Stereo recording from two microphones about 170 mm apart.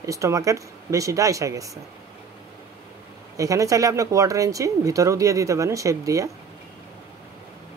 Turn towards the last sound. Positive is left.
turn(degrees=-20)  # may be behind; listen again after turning